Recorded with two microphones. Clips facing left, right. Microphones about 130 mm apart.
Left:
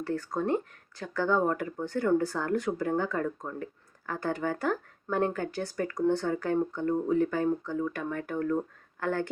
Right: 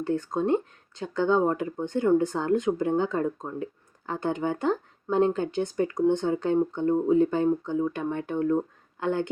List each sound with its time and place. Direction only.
0.0 s speech: 20° right (ahead or behind)